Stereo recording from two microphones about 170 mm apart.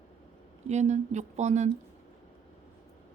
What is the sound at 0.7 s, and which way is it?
Speech, 45° right (ahead or behind).